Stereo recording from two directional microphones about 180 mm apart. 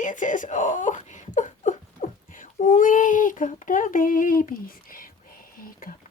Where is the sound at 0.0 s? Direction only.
45° left (ahead or behind).